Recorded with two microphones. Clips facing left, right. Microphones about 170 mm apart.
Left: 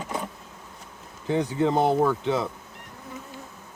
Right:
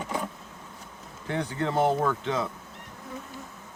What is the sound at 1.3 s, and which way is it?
Speech, 15° left (ahead or behind).